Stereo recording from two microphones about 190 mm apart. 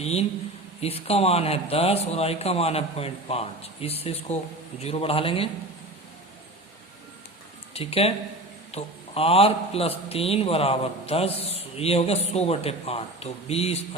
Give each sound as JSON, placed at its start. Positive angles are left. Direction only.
{"t": 0.0, "sound": "a man's voice", "side_deg": 35}
{"t": 7.7, "sound": "a man's voice", "side_deg": 30}